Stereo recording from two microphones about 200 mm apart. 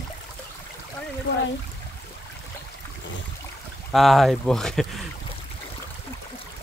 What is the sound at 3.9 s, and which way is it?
Speech, centre (ahead or behind).